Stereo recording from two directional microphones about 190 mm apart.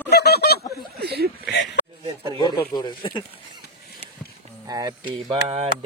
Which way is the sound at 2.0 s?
25° right (ahead or behind).